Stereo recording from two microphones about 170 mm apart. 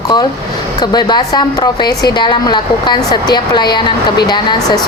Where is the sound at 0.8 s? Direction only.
25° left (ahead or behind).